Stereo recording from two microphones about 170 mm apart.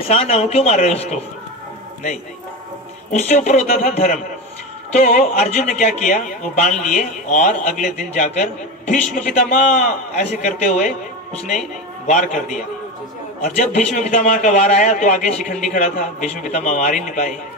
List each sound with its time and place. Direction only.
0.1 s speech: 35° left (ahead or behind)
3.1 s a man's voice: 40° left (ahead or behind)
12.1 s a man's voice: 50° left (ahead or behind)
13.6 s a man's voice: 45° left (ahead or behind)